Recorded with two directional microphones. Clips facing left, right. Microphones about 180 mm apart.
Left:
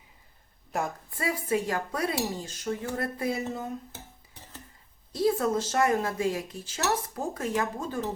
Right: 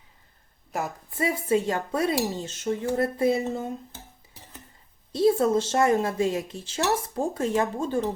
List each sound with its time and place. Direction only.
0.7 s a woman's voice: centre (ahead or behind)
1.1 s speech: 25° right (ahead or behind)
5.1 s speech: 25° right (ahead or behind)